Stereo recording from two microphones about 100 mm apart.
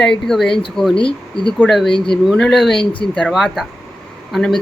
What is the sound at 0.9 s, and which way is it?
Speech, 60° left (ahead or behind).